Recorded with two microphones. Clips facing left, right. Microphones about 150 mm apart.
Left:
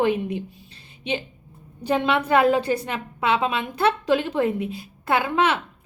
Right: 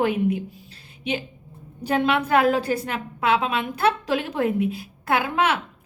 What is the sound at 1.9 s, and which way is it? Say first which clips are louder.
A woman's voice: even; 5° right (ahead or behind).